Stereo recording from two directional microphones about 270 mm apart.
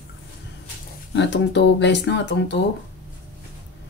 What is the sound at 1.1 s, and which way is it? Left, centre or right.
Speech, left.